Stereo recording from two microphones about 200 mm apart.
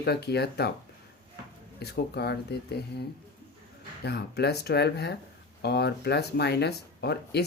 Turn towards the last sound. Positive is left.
turn(degrees=55)  # may be behind; listen again after turning